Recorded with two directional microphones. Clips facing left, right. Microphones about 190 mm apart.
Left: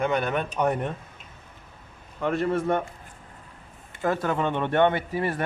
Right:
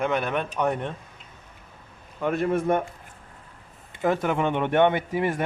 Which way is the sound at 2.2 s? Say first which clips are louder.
Right 1 dB; 5° right (ahead or behind).